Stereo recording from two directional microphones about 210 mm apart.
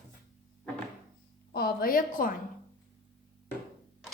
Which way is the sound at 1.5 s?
45° left (ahead or behind).